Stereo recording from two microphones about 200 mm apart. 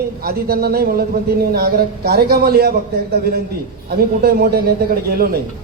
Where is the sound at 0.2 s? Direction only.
50° right (ahead or behind).